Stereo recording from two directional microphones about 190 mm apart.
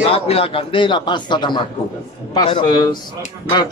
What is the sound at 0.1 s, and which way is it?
Speech, 30° left (ahead or behind).